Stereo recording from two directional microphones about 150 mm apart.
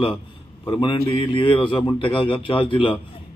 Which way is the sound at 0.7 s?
35° left (ahead or behind).